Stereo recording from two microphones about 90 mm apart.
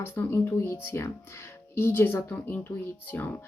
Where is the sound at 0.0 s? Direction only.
25° left (ahead or behind).